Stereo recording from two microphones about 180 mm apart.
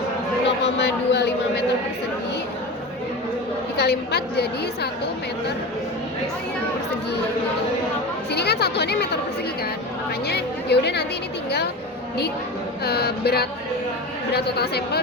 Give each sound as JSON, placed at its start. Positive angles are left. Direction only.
{"t": 0.4, "sound": "speech", "side_deg": 70}
{"t": 3.8, "sound": "a woman's voice", "side_deg": 65}
{"t": 8.3, "sound": "a woman's voice", "side_deg": 65}
{"t": 10.2, "sound": "a woman's voice", "side_deg": 65}
{"t": 12.8, "sound": "a woman's voice", "side_deg": 60}